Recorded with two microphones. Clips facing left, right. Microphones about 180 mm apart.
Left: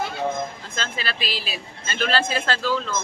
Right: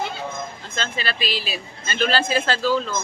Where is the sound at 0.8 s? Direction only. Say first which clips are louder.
Right 3 dB; centre (ahead or behind).